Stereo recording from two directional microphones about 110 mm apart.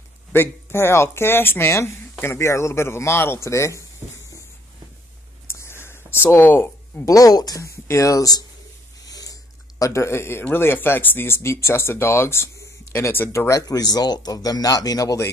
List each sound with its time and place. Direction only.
0.3 s speech: 20° left (ahead or behind)
5.5 s whispering: 25° left (ahead or behind)
6.3 s speech: 20° left (ahead or behind)
7.1 s speech: 35° left (ahead or behind)
13.5 s speech: 35° left (ahead or behind)